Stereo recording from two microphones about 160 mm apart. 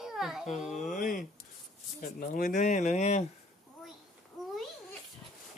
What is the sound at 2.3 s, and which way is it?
Speech, 55° left (ahead or behind).